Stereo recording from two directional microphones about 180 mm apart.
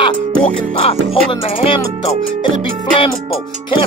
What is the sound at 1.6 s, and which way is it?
Music, 30° left (ahead or behind).